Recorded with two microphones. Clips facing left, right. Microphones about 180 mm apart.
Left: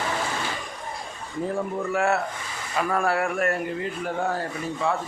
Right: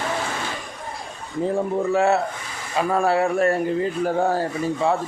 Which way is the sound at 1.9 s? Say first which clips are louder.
Right 4 dB; 25° right (ahead or behind).